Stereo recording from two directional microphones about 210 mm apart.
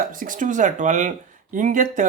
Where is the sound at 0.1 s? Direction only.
40° right (ahead or behind).